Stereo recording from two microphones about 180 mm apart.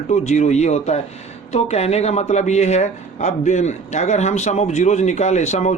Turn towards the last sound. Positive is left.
turn(degrees=40)  # may be behind; listen again after turning